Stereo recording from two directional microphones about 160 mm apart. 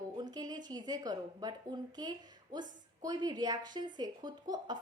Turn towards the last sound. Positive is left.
turn(degrees=-25)  # may be behind; listen again after turning